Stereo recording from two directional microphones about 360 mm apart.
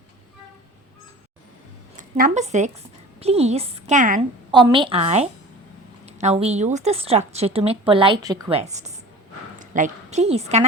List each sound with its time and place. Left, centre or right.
2.0 s a woman's voice: right